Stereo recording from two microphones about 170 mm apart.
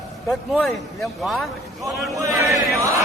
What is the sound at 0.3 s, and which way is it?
A man's voice, centre (ahead or behind).